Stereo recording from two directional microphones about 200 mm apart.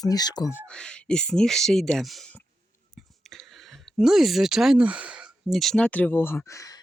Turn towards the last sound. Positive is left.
turn(degrees=15)  # may be behind; listen again after turning